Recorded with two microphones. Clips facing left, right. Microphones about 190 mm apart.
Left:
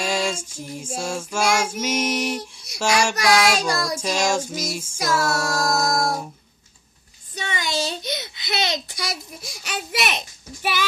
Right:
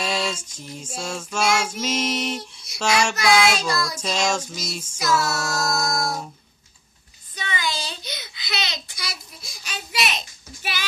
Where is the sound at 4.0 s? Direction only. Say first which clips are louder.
Left 2 dB; 10° left (ahead or behind).